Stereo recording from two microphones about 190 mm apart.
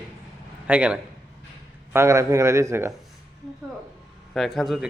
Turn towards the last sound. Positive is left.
turn(degrees=0)  # may be behind; listen again after turning